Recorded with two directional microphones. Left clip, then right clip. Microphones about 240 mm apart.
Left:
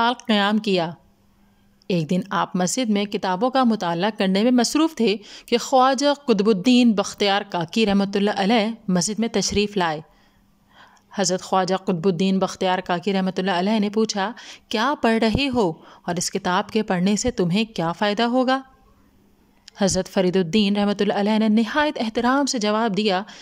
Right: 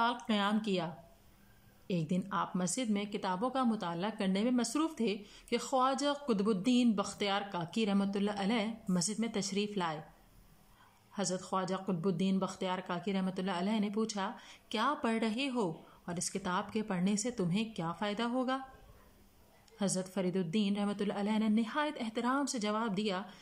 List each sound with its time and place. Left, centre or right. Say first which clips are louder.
0.0 s speech: left 12 dB; left
11.1 s speech: left 15 dB; left
19.6 s speech: left 15 dB; left